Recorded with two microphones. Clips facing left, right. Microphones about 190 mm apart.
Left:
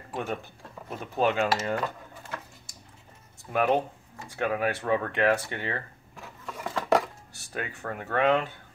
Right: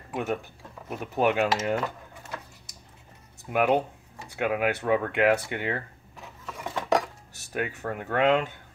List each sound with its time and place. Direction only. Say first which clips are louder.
0.8 s speech: right 1 dB; 10° right (ahead or behind)
3.4 s speech: right 1 dB; 15° right (ahead or behind)
6.4 s a sound: left 1 dB; centre (ahead or behind)
7.3 s speech: right 5 dB; 20° right (ahead or behind)